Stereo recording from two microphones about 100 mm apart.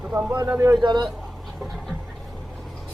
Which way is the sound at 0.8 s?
50° right (ahead or behind).